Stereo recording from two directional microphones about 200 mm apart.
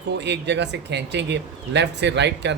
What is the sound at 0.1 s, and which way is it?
Speech, 60° right (ahead or behind).